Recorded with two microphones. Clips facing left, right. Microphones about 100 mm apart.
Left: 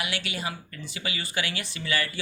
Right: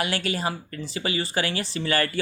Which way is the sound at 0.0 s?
40° right (ahead or behind).